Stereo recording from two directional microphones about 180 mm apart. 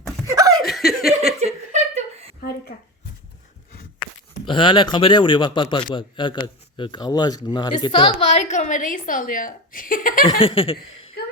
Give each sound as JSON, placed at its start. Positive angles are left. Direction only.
{"t": 0.3, "sound": "laughter", "side_deg": -20}
{"t": 0.7, "sound": "laughter", "side_deg": 0}
{"t": 1.7, "sound": "a sound", "side_deg": -40}
{"t": 4.4, "sound": "a man's voice", "side_deg": 30}
{"t": 10.2, "sound": "a man's voice", "side_deg": 30}